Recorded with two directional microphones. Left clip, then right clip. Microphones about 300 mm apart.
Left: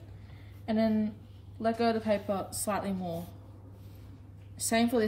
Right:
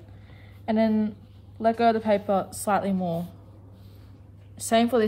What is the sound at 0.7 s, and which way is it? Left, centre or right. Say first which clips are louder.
Speech: right 6 dB; centre.